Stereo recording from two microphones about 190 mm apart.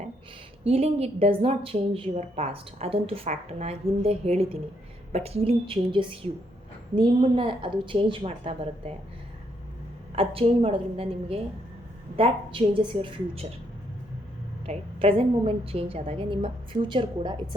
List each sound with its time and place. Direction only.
0.6 s a woman's voice: 30° right (ahead or behind)
10.2 s a woman's voice: 30° right (ahead or behind)
14.7 s a woman's voice: 30° right (ahead or behind)